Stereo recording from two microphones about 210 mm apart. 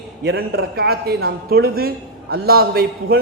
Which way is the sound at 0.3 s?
50° right (ahead or behind).